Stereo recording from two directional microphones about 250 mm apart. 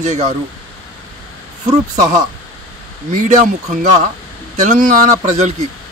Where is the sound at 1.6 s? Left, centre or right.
Right.